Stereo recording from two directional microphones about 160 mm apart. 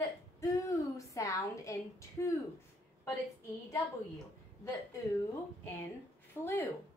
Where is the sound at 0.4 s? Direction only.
20° left (ahead or behind).